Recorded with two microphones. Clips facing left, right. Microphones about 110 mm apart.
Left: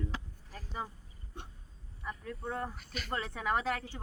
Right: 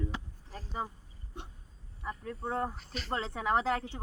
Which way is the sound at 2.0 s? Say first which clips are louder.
Right 3 dB; 30° right (ahead or behind).